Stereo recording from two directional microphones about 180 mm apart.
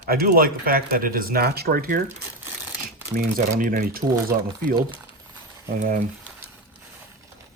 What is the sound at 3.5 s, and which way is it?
Speech, 45° right (ahead or behind).